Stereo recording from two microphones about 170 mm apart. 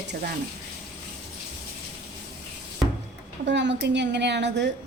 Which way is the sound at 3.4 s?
90° right.